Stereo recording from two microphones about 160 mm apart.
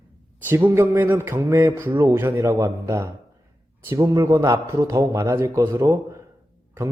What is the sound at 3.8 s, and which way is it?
A man's voice, 20° right (ahead or behind).